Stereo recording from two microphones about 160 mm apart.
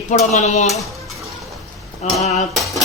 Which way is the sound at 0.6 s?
Centre (ahead or behind).